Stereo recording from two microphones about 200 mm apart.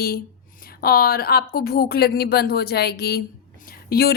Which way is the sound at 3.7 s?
50° left (ahead or behind).